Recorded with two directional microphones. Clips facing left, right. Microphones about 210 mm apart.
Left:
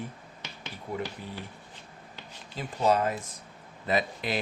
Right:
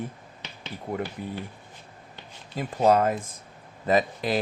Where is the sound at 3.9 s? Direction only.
40° right (ahead or behind).